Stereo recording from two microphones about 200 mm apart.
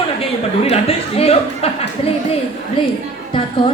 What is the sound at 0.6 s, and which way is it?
Speech, 30° left (ahead or behind).